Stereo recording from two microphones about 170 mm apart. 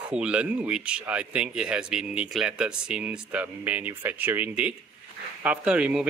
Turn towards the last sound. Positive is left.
turn(degrees=-5)  # may be behind; listen again after turning